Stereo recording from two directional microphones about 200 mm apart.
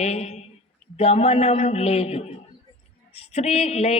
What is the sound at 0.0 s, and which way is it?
A man's voice, 35° left (ahead or behind).